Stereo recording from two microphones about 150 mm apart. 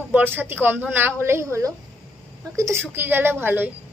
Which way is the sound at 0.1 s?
15° right (ahead or behind).